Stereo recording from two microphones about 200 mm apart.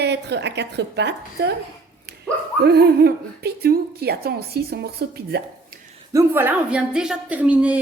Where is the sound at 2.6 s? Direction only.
55° right (ahead or behind).